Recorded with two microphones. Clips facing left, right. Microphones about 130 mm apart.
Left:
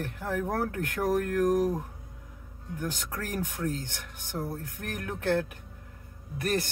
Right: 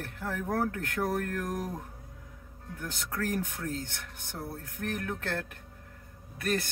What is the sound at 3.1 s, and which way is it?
Speech, 15° left (ahead or behind).